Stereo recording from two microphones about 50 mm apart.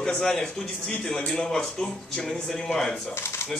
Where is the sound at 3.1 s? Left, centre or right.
Left.